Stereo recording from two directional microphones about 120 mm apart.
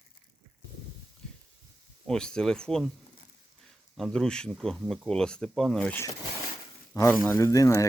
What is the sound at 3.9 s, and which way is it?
Speech, 5° left (ahead or behind).